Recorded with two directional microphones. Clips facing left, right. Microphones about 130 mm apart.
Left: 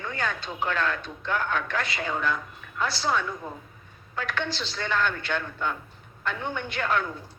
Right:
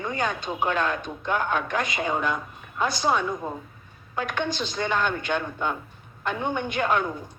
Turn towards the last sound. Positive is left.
turn(degrees=-20)  # may be behind; listen again after turning